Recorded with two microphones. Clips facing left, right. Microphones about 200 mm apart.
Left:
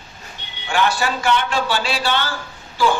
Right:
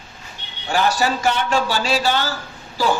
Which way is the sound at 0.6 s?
40° right (ahead or behind).